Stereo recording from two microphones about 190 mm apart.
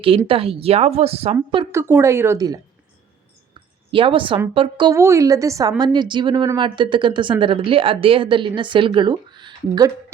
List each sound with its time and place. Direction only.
0.3 s speech: 30° right (ahead or behind)
1.7 s speech: 15° right (ahead or behind)
3.9 s speech: 25° right (ahead or behind)
4.9 s speech: 15° right (ahead or behind)